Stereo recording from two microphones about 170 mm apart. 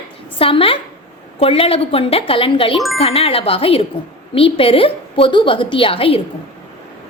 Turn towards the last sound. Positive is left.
turn(degrees=30)  # may be behind; listen again after turning